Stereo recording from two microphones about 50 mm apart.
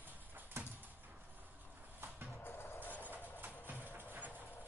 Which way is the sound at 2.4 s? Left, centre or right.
Left.